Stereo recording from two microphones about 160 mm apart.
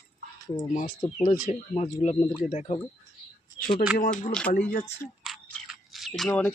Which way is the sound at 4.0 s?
55° left (ahead or behind).